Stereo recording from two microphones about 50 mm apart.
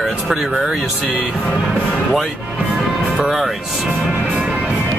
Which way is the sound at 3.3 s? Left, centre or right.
Centre.